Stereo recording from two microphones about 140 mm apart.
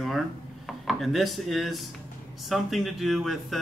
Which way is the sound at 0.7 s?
Centre (ahead or behind).